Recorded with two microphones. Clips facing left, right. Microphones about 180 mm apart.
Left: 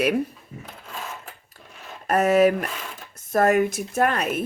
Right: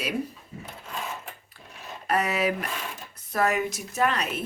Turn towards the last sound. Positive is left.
turn(degrees=50)  # may be behind; listen again after turning